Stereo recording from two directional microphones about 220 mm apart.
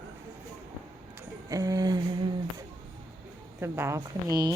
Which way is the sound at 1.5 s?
15° right (ahead or behind).